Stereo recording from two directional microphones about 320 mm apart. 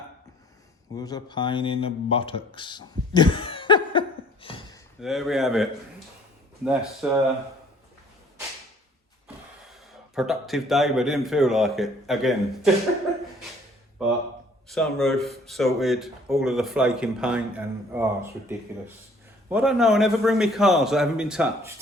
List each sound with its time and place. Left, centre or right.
0.9 s speech: centre
4.4 s gasp: centre
4.9 s speech: centre
6.7 s speech: centre
10.2 s speech: centre
14.7 s speech: centre